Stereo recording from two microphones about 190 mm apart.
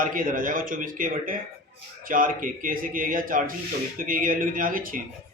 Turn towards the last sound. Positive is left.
turn(degrees=-45)  # may be behind; listen again after turning